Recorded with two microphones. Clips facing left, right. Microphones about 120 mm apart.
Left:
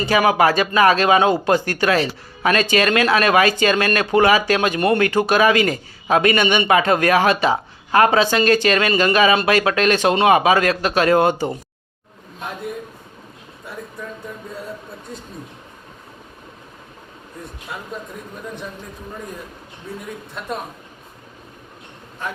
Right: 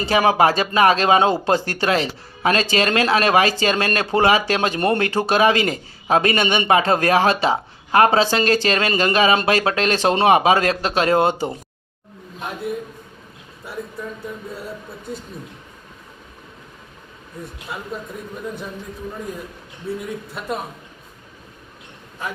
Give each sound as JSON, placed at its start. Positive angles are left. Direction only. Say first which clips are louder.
{"t": 0.0, "sound": "speech", "louder": "even", "side_deg": -30}
{"t": 13.7, "sound": "a sound", "louder": "right 3 dB", "side_deg": -5}
{"t": 17.7, "sound": "a man's voice", "louder": "right 1 dB", "side_deg": -5}